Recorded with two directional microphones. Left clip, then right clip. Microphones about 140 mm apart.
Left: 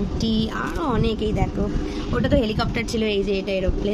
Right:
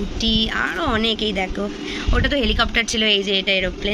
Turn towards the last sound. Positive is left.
turn(degrees=10)  # may be behind; listen again after turning